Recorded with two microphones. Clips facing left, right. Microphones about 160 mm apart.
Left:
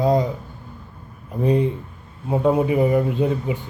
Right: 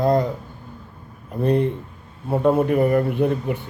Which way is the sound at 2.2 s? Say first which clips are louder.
Even; 10° left (ahead or behind).